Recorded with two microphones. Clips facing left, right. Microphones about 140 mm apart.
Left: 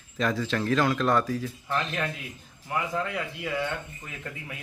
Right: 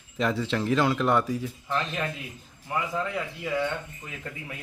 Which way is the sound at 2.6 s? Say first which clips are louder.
Even; 5° right (ahead or behind).